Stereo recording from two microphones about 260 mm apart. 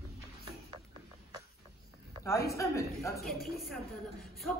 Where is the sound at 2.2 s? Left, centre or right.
Centre.